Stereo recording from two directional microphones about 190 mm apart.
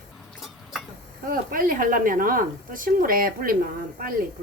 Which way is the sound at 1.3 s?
50° right (ahead or behind).